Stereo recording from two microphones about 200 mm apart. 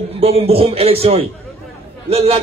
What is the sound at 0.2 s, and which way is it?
A man's voice, 30° right (ahead or behind).